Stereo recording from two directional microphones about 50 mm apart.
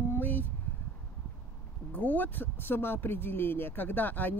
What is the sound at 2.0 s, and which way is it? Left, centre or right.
Speech, left.